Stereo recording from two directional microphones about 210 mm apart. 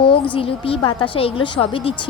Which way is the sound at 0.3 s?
25° left (ahead or behind).